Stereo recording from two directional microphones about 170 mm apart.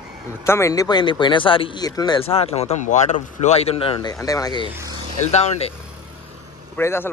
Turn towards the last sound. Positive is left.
turn(degrees=15)  # may be behind; listen again after turning